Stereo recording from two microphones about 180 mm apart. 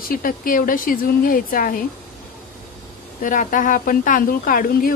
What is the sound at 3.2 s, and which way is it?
A woman's voice, 45° left (ahead or behind).